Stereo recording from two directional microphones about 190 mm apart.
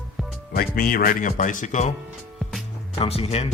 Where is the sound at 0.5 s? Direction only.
50° left (ahead or behind).